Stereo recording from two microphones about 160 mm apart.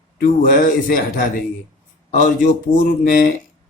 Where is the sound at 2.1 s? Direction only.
55° left (ahead or behind).